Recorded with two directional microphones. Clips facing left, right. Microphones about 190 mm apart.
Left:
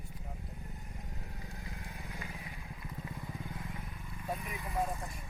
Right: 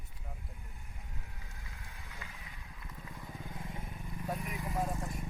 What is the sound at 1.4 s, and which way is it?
Vehicle, 35° left (ahead or behind).